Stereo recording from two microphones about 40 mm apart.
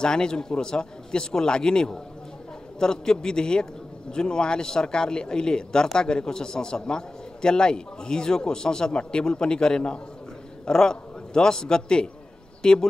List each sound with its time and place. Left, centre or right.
0.0 s a man's voice: centre